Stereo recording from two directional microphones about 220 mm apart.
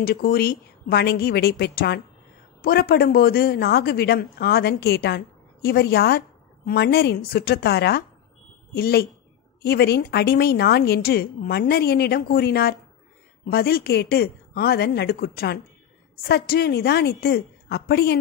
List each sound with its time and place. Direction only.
0.0 s a woman's voice: 40° left (ahead or behind)